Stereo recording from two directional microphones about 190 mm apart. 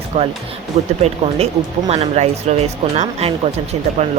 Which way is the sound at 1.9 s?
35° right (ahead or behind).